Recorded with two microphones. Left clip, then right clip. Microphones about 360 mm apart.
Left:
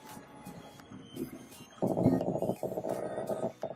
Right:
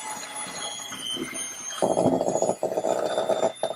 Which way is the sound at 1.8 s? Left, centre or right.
Right.